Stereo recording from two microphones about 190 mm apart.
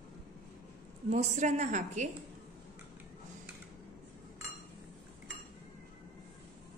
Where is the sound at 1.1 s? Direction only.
40° right (ahead or behind).